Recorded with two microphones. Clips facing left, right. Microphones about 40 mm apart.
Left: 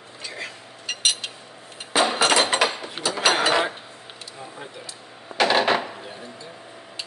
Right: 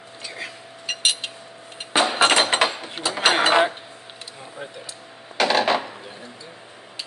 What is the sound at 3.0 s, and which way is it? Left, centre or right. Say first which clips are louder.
Mechanisms: right 1 dB; right.